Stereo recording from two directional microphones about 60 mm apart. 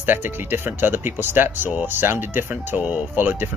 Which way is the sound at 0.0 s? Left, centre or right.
Right.